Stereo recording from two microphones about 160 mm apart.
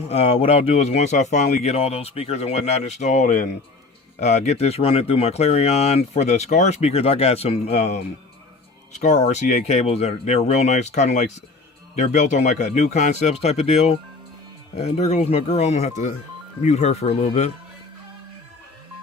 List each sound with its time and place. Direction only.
0.1 s speech: 40° left (ahead or behind)